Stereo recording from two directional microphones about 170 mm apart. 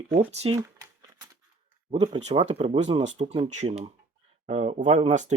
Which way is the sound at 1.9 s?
30° right (ahead or behind).